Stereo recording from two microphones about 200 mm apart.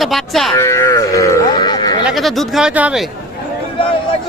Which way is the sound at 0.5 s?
15° left (ahead or behind).